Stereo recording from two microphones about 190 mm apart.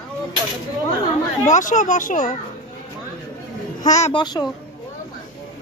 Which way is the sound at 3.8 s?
40° left (ahead or behind).